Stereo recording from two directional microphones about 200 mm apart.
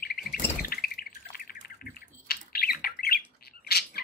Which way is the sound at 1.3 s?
50° left (ahead or behind).